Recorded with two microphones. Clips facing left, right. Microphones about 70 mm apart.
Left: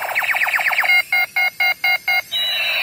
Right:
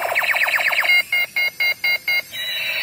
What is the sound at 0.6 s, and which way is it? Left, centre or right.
Alarm, left.